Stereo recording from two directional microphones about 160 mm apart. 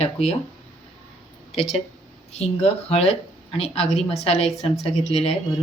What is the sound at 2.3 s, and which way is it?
A woman's voice, 40° left (ahead or behind).